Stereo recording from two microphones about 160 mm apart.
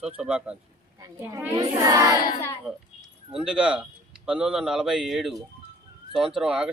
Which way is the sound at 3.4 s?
5° right (ahead or behind).